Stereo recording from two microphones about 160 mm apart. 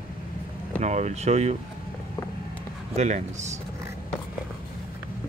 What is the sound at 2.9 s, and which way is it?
Speech, 50° right (ahead or behind).